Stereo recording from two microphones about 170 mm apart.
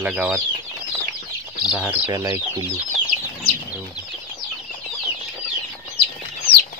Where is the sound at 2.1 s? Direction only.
20° right (ahead or behind).